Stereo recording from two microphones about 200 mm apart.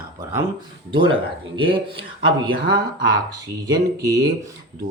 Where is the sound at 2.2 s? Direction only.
25° right (ahead or behind).